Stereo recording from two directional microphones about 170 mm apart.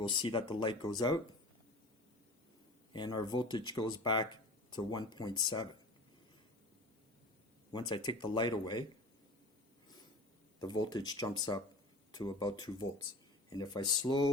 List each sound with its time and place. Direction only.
0.1 s speech: 30° left (ahead or behind)
2.9 s speech: 25° left (ahead or behind)
7.7 s speech: 25° left (ahead or behind)
10.6 s speech: 25° left (ahead or behind)